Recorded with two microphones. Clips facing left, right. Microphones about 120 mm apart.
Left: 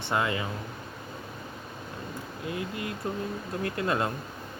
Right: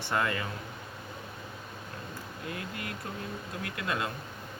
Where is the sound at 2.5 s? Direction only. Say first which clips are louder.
Left 6 dB; 20° left (ahead or behind).